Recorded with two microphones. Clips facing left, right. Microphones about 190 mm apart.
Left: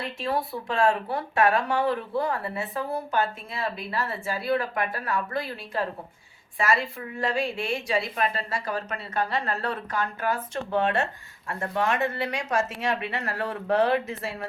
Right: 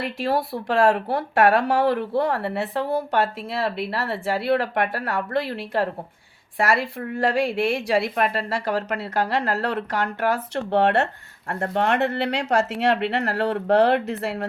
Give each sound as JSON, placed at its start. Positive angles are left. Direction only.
{"t": 0.0, "sound": "a woman's voice", "side_deg": -80}